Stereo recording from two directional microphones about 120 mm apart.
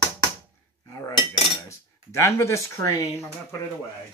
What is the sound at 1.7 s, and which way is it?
Speech, 25° left (ahead or behind).